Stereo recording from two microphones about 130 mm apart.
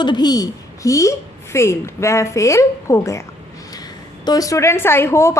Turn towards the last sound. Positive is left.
turn(degrees=20)  # may be behind; listen again after turning